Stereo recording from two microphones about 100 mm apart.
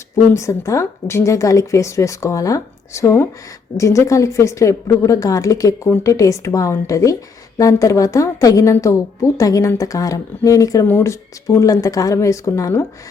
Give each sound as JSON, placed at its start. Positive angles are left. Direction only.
{"t": 0.3, "sound": "a woman's voice", "side_deg": 30}